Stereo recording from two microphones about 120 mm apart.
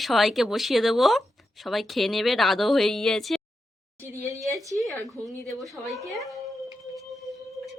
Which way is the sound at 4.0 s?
25° right (ahead or behind).